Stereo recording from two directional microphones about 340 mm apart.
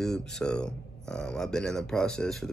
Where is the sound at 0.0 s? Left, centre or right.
Centre.